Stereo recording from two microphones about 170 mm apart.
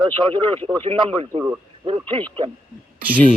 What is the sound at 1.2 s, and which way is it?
Speech, 35° right (ahead or behind).